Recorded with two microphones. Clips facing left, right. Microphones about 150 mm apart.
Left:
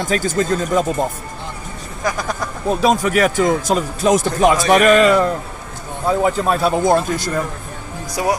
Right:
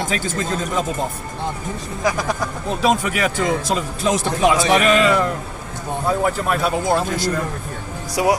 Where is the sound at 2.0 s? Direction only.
5° right (ahead or behind).